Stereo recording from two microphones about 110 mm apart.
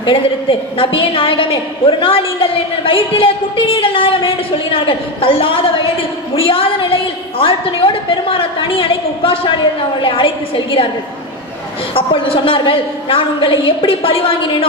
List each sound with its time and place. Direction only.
0.8 s a woman's voice: 50° left (ahead or behind)
11.9 s a woman's voice: 55° left (ahead or behind)